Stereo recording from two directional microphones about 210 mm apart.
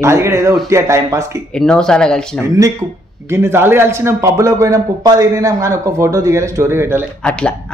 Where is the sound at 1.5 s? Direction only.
5° left (ahead or behind).